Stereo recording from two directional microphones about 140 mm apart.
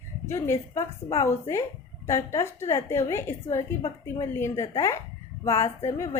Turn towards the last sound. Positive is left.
turn(degrees=20)  # may be behind; listen again after turning